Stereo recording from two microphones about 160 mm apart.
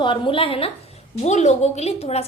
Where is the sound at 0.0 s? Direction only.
30° left (ahead or behind).